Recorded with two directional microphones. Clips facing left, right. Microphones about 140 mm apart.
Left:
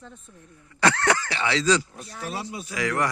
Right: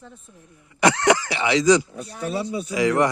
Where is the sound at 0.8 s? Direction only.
15° right (ahead or behind).